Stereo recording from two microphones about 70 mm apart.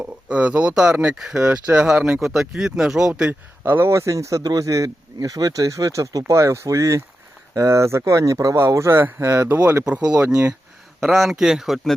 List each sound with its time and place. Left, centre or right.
0.0 s speech: centre
3.6 s speech: right
9.5 s speech: right
11.0 s speech: centre